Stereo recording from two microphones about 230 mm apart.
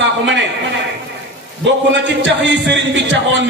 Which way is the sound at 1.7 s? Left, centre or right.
Right.